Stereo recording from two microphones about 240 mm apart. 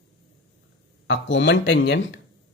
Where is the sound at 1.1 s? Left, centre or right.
Left.